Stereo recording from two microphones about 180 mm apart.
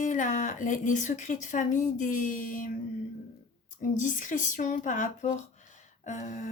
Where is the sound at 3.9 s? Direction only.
45° left (ahead or behind).